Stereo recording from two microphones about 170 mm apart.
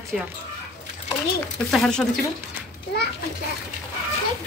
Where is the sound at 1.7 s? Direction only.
Centre (ahead or behind).